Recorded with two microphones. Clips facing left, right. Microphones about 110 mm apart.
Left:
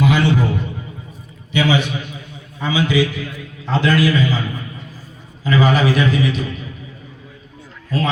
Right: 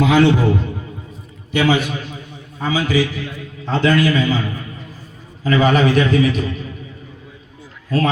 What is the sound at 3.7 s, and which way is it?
Speech, 5° left (ahead or behind).